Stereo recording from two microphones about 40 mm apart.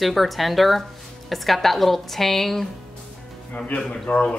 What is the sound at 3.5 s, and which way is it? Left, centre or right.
Speech, left.